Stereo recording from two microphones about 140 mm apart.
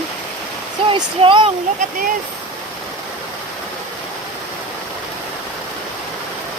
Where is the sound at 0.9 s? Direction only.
35° right (ahead or behind).